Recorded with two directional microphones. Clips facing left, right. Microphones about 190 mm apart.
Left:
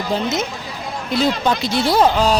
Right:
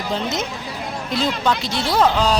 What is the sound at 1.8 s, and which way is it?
Speech, 10° left (ahead or behind).